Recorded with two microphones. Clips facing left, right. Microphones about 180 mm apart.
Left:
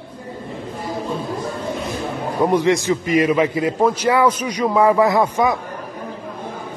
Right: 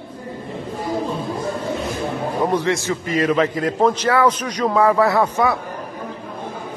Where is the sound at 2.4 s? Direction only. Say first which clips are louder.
Left 4 dB; 15° left (ahead or behind).